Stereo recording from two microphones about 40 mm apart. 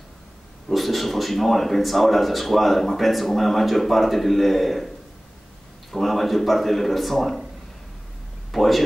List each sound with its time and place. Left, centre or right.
0.7 s a man's voice: centre
8.5 s speech: centre